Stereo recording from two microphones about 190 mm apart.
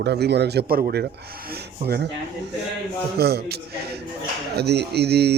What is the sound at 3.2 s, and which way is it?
Speech, 55° right (ahead or behind).